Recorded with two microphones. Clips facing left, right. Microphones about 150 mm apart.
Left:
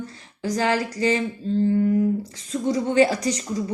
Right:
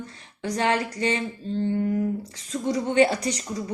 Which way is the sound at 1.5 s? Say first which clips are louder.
Left 5 dB; centre (ahead or behind).